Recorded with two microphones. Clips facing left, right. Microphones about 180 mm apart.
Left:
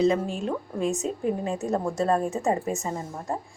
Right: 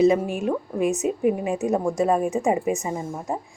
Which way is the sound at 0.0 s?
15° right (ahead or behind).